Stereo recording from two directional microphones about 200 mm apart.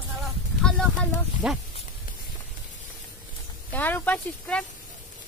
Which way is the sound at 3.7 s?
10° left (ahead or behind).